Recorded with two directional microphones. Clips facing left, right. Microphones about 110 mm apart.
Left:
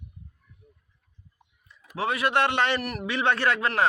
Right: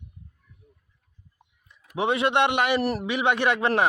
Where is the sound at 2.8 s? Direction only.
35° right (ahead or behind).